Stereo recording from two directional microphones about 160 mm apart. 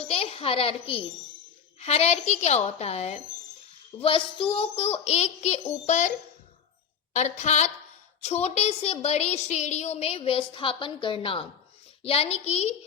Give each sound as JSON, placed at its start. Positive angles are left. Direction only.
{"t": 0.1, "sound": "a child's voice", "side_deg": 40}